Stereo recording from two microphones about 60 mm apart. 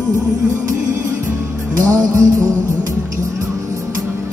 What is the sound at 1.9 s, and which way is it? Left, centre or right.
Music, right.